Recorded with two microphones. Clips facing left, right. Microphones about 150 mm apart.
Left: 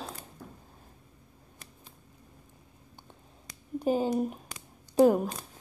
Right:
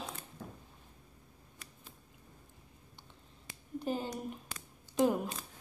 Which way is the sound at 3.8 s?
45° left (ahead or behind).